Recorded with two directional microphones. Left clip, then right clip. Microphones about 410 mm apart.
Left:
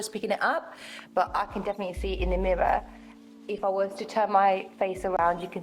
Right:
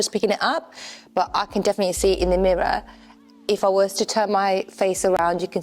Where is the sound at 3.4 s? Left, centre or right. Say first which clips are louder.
Right 9 dB; right.